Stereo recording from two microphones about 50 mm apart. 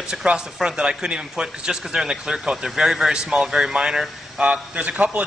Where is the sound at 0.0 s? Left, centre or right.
Centre.